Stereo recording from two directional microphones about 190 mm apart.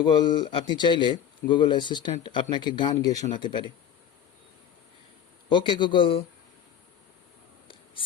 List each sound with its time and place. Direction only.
0.0 s speech: 25° left (ahead or behind)
5.5 s speech: 25° left (ahead or behind)